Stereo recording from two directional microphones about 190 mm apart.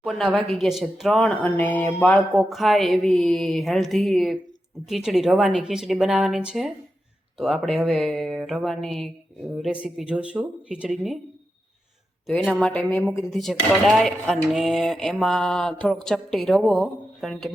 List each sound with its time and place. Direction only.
0.0 s speech: centre (ahead or behind)
12.3 s speech: centre (ahead or behind)